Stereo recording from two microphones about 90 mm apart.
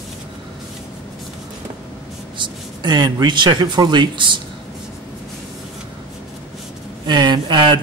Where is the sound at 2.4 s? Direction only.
50° right (ahead or behind).